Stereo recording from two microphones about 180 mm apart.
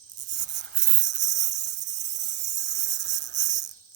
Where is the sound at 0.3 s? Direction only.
75° right (ahead or behind).